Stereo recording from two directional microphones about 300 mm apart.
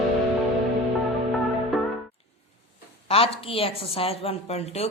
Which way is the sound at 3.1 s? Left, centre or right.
Centre.